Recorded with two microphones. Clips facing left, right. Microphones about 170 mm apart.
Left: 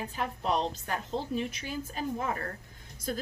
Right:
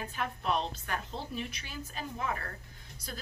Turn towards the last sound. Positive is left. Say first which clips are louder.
# left 9 dB
turn(degrees=50)  # may be behind; listen again after turning